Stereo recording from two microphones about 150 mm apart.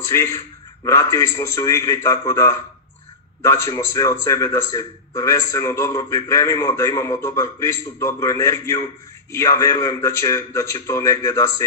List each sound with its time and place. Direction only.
0.1 s a man's voice: 20° left (ahead or behind)